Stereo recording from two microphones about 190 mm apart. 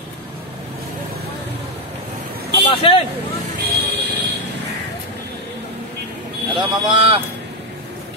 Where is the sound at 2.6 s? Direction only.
30° left (ahead or behind).